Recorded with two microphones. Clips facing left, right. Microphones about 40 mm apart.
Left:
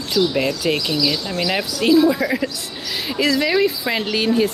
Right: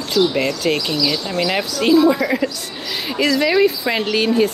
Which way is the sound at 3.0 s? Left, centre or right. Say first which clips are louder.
Right 2 dB; centre.